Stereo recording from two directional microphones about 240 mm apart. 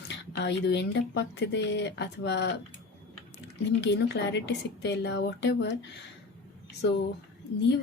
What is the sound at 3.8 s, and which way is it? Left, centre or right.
Speech, left.